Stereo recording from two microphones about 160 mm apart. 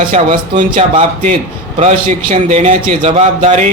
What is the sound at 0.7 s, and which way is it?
A man's voice, 40° right (ahead or behind).